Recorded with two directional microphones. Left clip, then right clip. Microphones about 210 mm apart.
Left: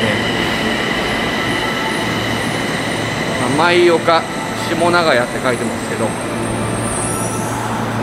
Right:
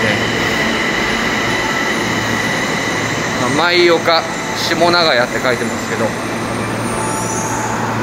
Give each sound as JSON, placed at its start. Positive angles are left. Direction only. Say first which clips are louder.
{"t": 3.6, "sound": "speech", "louder": "even", "side_deg": -5}